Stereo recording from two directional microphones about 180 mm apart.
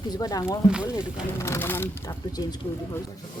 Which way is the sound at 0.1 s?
20° left (ahead or behind).